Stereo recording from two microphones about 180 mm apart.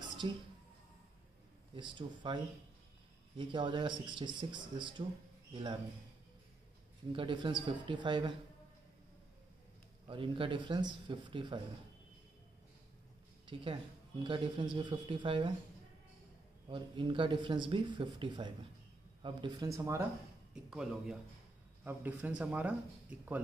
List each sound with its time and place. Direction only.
0.2 s speech: 25° right (ahead or behind)
1.8 s speech: 25° right (ahead or behind)
7.1 s speech: 25° right (ahead or behind)
10.0 s speech: 30° right (ahead or behind)
13.5 s speech: 30° right (ahead or behind)
16.6 s speech: 25° right (ahead or behind)
20.7 s speech: 5° right (ahead or behind)